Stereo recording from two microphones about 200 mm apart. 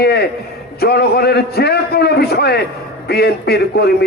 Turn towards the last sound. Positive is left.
turn(degrees=55)  # may be behind; listen again after turning